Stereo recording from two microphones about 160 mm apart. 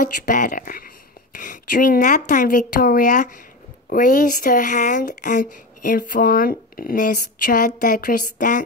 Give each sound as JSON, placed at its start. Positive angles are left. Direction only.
{"t": 0.0, "sound": "speech", "side_deg": 55}